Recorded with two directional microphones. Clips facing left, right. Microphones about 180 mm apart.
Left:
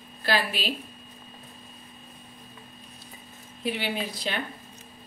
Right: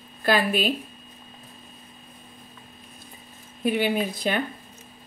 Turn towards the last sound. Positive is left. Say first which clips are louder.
# right 6 dB
turn(degrees=-50)  # may be behind; listen again after turning